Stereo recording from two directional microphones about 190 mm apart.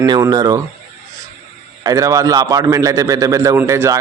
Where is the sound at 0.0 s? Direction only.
20° right (ahead or behind).